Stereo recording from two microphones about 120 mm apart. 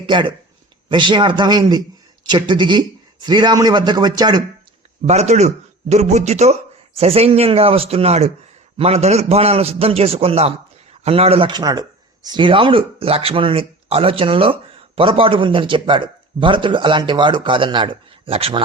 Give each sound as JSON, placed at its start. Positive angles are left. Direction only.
{"t": 0.0, "sound": "a man's voice", "side_deg": -45}
{"t": 5.0, "sound": "a man's voice", "side_deg": -65}
{"t": 11.6, "sound": "speech", "side_deg": -35}